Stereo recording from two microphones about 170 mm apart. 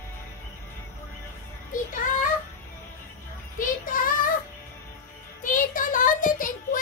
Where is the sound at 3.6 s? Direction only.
55° left (ahead or behind).